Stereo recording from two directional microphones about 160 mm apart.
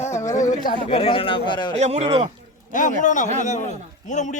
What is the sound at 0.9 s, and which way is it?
Speech, 35° left (ahead or behind).